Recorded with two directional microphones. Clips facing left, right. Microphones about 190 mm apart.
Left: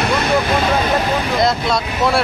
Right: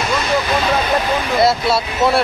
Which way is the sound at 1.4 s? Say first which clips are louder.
Right 4 dB; 5° right (ahead or behind).